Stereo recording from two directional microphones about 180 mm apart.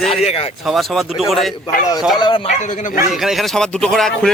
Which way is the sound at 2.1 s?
25° left (ahead or behind).